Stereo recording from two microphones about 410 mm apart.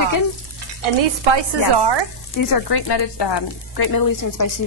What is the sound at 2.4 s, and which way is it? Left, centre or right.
Speech, left.